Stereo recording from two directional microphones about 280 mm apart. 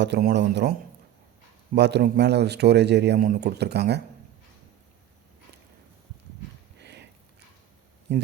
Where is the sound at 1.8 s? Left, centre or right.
Right.